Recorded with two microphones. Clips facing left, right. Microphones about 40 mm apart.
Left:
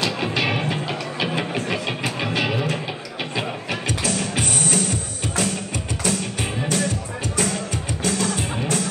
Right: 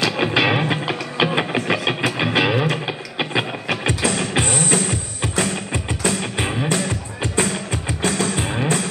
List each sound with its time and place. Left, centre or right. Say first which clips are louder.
0.2 s music: right 5 dB; right
1.5 s a sound: right 4 dB; right
2.1 s music: right 4 dB; right